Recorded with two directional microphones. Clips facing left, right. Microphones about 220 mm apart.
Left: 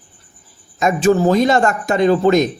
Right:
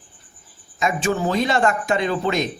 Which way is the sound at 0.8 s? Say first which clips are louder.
Left 8 dB; 40° left (ahead or behind).